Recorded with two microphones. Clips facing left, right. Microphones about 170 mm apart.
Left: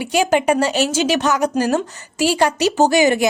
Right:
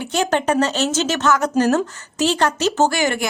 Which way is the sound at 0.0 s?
10° left (ahead or behind).